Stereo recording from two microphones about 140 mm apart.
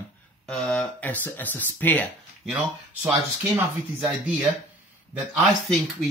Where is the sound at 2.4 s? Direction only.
5° right (ahead or behind).